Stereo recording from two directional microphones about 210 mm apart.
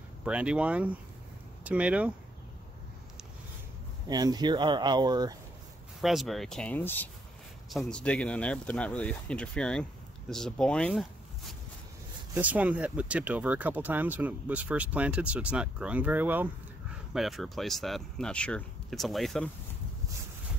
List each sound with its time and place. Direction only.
0.2 s speech: 5° right (ahead or behind)
4.1 s speech: 20° right (ahead or behind)
5.9 s speech: centre (ahead or behind)
12.4 s speech: 5° right (ahead or behind)